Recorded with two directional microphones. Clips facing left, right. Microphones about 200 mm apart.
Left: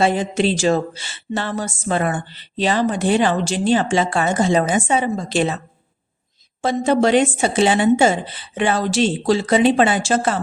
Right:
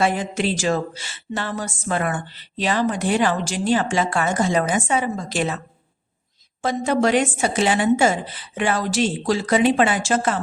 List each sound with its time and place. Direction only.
0.0 s a woman's voice: 25° left (ahead or behind)
6.6 s a woman's voice: 30° left (ahead or behind)